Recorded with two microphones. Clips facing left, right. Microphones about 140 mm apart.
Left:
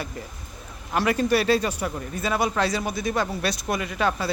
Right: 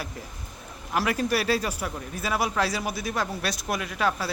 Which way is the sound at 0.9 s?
Centre (ahead or behind).